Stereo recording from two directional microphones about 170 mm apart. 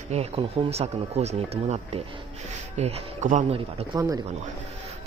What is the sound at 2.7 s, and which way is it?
Speech, 45° right (ahead or behind).